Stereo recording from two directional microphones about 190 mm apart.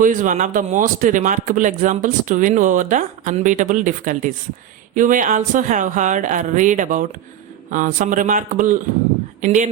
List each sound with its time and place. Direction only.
0.0 s speech: 45° right (ahead or behind)